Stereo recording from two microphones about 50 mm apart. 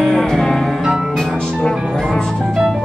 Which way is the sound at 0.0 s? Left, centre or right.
Centre.